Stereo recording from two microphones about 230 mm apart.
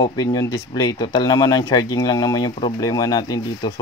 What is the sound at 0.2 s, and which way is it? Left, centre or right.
Speech, centre.